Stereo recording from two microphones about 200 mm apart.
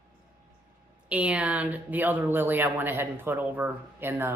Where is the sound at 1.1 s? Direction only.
5° right (ahead or behind).